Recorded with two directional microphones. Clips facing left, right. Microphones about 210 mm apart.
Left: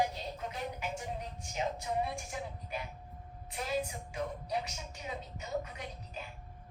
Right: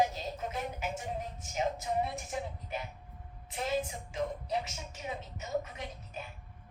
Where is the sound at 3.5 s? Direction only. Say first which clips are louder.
Right 2 dB; 25° right (ahead or behind).